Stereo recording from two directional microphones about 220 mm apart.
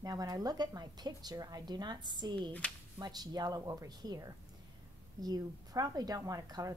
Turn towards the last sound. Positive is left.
turn(degrees=-15)  # may be behind; listen again after turning